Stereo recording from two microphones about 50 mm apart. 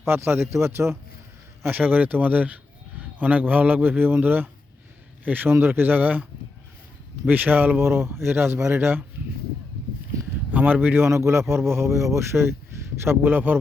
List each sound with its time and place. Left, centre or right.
0.0 s speech: right
1.7 s speech: right
7.3 s speech: right
7.8 s a man's voice: right
10.5 s speech: right
11.1 s speech: right